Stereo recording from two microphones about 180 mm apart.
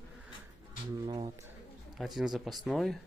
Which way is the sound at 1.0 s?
25° right (ahead or behind).